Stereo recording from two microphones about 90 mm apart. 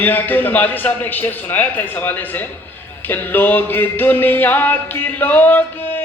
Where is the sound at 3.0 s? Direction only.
20° left (ahead or behind).